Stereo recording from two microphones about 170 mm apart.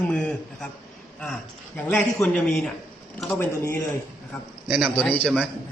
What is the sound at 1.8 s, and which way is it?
Speech, 5° left (ahead or behind).